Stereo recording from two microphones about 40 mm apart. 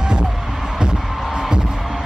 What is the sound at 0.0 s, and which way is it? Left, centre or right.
Music, right.